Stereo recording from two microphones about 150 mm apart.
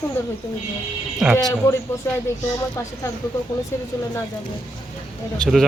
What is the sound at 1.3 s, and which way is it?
Speech, 20° left (ahead or behind).